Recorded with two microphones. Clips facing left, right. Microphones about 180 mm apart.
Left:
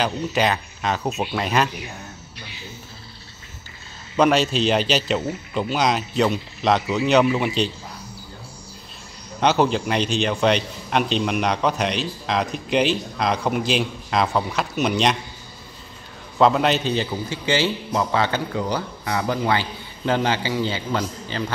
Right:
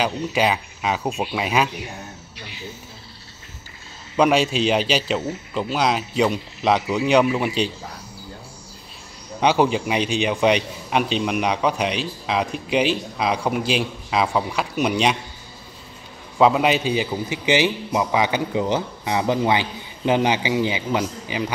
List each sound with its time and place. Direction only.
0.0 s a man's voice: 5° right (ahead or behind)
4.2 s a man's voice: 10° right (ahead or behind)
9.4 s a man's voice: 10° right (ahead or behind)
16.3 s a man's voice: 5° right (ahead or behind)